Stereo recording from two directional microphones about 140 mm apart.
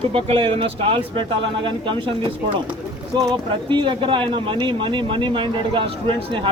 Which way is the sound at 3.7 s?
35° right (ahead or behind).